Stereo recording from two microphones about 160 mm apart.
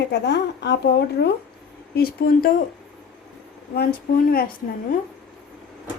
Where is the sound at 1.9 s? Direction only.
70° left (ahead or behind).